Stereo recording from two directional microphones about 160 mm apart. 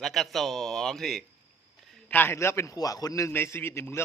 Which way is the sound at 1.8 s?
Centre (ahead or behind).